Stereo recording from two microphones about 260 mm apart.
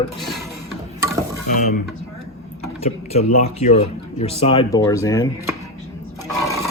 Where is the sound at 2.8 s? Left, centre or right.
Left.